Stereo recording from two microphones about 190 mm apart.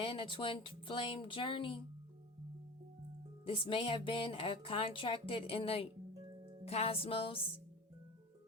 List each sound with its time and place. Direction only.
0.0 s speech: 30° left (ahead or behind)
3.4 s speech: 30° left (ahead or behind)